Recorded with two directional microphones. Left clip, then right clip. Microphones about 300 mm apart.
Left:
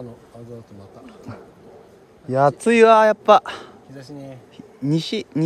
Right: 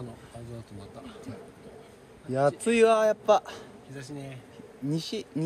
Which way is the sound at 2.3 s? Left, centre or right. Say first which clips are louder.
Left 8 dB; centre.